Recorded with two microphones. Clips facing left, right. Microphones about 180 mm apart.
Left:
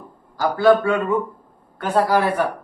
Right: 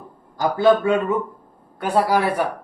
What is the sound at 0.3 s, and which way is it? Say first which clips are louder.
A man's voice: left 1 dB; 20° right (ahead or behind).